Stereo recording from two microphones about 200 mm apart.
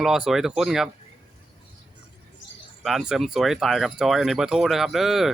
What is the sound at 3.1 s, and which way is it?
Speech, centre (ahead or behind).